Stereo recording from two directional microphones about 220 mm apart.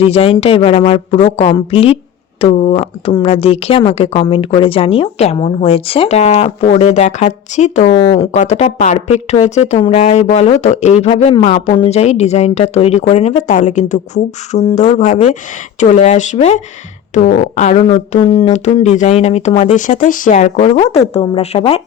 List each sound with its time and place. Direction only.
0.1 s speech: 25° left (ahead or behind)